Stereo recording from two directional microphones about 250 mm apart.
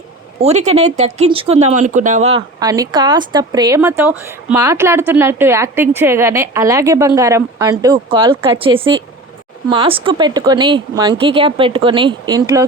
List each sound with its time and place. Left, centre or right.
0.4 s speech: right
2.6 s speech: centre